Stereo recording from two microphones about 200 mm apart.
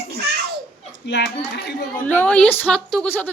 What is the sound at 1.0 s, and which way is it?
Speech, 60° left (ahead or behind).